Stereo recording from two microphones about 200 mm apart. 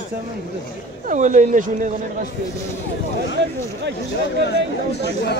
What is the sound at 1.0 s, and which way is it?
Speech, 40° right (ahead or behind).